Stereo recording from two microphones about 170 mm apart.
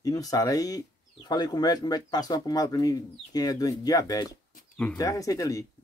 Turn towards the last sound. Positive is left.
turn(degrees=20)  # may be behind; listen again after turning